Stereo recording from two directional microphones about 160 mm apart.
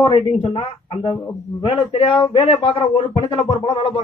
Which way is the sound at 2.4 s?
35° left (ahead or behind).